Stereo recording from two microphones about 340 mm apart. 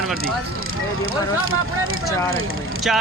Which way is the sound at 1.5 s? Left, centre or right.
Right.